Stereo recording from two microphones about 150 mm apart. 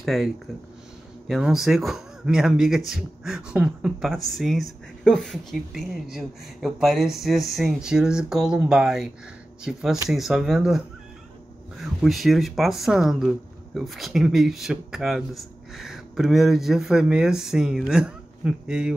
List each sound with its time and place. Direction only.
0.0 s speech: centre (ahead or behind)
11.8 s speech: centre (ahead or behind)